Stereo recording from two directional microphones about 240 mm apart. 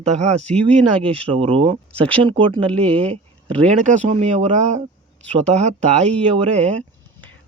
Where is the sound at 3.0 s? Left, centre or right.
Right.